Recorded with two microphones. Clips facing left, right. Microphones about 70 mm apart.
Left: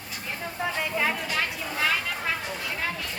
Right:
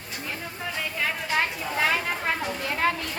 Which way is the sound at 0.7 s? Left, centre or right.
Centre.